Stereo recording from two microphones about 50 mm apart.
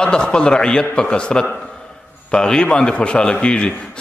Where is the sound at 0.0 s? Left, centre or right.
Centre.